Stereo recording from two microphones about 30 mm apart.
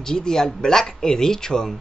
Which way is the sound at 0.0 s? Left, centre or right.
Left.